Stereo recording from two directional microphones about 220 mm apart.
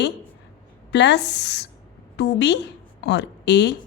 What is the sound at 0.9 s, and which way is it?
A woman's voice, 50° left (ahead or behind).